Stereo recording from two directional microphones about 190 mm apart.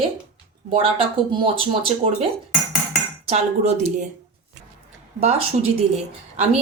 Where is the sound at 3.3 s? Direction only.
35° right (ahead or behind).